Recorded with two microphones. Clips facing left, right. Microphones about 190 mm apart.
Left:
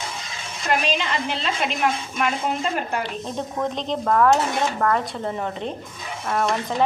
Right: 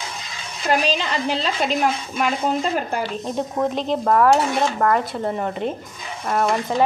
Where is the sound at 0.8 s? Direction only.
35° right (ahead or behind).